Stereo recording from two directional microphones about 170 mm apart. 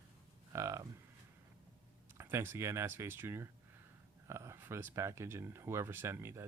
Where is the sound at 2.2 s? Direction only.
15° right (ahead or behind).